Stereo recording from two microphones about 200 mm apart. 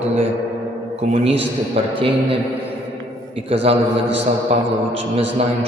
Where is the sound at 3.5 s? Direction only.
30° right (ahead or behind).